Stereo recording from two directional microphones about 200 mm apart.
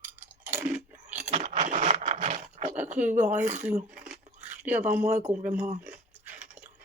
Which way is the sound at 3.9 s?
5° right (ahead or behind).